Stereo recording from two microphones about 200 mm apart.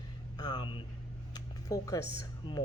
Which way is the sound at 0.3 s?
20° left (ahead or behind).